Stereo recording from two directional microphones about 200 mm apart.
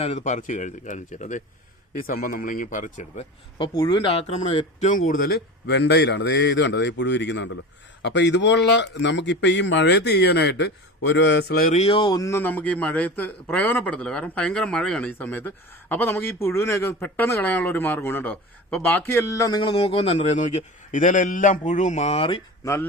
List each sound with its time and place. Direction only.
0.0 s a man's voice: 35° left (ahead or behind)
3.6 s speech: 25° left (ahead or behind)
5.0 s a man's voice: 45° left (ahead or behind); by 22.4 s 30° left (ahead or behind)
22.6 s speech: 15° left (ahead or behind)